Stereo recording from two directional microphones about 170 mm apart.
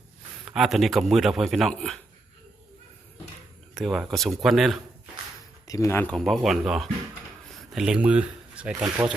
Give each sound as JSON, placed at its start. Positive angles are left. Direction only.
{"t": 0.4, "sound": "a man's voice", "side_deg": -5}
{"t": 3.8, "sound": "a man's voice", "side_deg": 0}
{"t": 5.6, "sound": "a man's voice", "side_deg": 20}